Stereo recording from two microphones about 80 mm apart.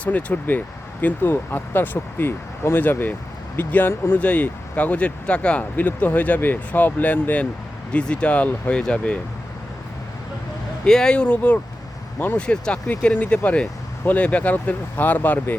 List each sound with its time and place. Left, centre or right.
0.0 s speech: centre
10.8 s speech: centre